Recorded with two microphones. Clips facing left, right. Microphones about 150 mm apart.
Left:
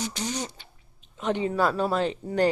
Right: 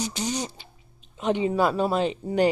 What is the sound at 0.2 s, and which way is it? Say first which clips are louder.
Speech: right 2 dB; 15° right (ahead or behind).